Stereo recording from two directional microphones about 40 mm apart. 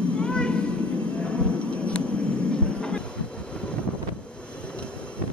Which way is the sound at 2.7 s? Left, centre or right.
Left.